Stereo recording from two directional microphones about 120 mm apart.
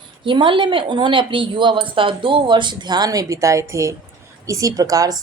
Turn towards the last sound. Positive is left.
turn(degrees=-30)  # may be behind; listen again after turning